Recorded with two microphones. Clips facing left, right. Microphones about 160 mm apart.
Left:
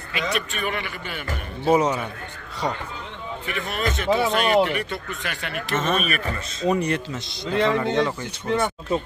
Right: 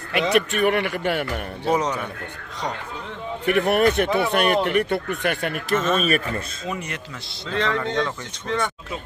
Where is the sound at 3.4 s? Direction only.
65° right (ahead or behind).